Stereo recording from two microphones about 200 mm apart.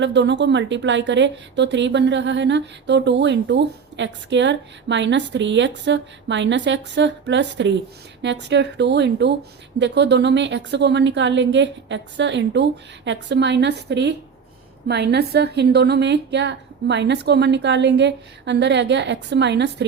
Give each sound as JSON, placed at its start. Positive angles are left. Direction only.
{"t": 0.0, "sound": "a woman's voice", "side_deg": -60}